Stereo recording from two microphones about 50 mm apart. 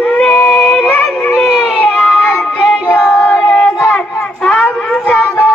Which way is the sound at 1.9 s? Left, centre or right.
Centre.